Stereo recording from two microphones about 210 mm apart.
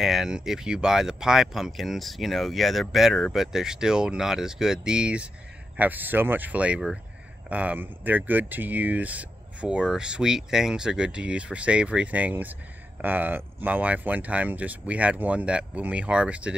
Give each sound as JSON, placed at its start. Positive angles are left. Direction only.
{"t": 0.0, "sound": "speech", "side_deg": 0}